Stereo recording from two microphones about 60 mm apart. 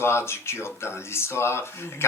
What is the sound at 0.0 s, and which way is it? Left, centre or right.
Speech, left.